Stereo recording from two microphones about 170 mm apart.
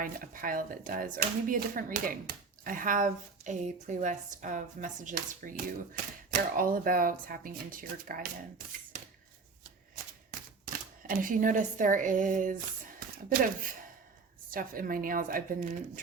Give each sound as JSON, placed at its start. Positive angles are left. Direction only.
{"t": 0.0, "sound": "speech", "side_deg": -55}
{"t": 10.7, "sound": "a woman's voice", "side_deg": -55}